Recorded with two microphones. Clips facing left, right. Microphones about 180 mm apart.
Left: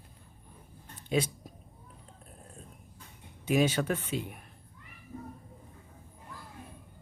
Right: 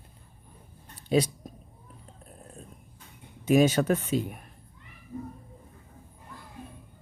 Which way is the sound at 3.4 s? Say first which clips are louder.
Right 6 dB; 45° right (ahead or behind).